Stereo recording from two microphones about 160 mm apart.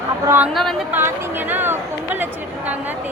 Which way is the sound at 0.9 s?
15° right (ahead or behind).